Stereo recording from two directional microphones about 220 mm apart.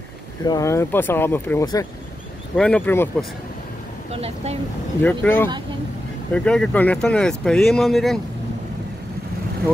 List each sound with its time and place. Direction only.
0.5 s speech: 15° left (ahead or behind)
2.5 s speech: 5° left (ahead or behind)
4.1 s speech: 25° right (ahead or behind)
5.2 s speech: 10° left (ahead or behind)